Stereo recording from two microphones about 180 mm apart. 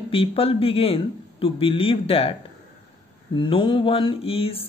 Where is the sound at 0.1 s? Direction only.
30° left (ahead or behind).